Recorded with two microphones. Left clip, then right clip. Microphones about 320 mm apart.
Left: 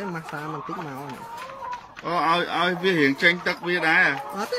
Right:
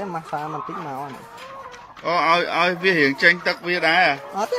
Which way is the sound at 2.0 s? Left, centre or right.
Centre.